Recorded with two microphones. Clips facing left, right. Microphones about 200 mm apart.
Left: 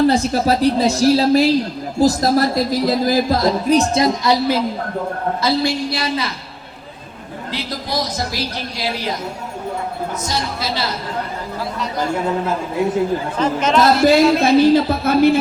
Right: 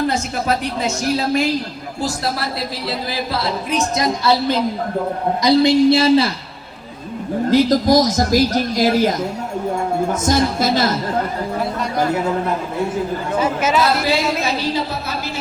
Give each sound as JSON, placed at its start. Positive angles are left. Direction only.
{"t": 0.1, "sound": "a woman's voice", "side_deg": 35}
{"t": 5.4, "sound": "a woman's voice", "side_deg": -20}
{"t": 7.5, "sound": "speech", "side_deg": -45}
{"t": 13.4, "sound": "speech", "side_deg": -5}
{"t": 13.8, "sound": "speech", "side_deg": 45}